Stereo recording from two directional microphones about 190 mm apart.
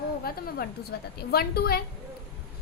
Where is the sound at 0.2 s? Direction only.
50° left (ahead or behind).